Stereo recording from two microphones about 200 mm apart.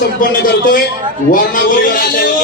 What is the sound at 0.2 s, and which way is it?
A man's voice, 45° left (ahead or behind).